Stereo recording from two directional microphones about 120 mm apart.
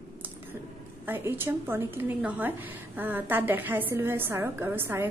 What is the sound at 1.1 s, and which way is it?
A woman's voice, 20° right (ahead or behind).